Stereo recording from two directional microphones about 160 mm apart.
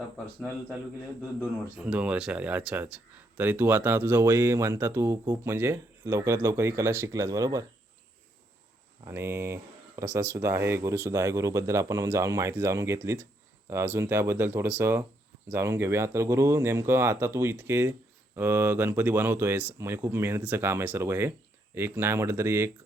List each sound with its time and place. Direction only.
1.8 s speech: 5° right (ahead or behind)
9.0 s speech: 15° right (ahead or behind)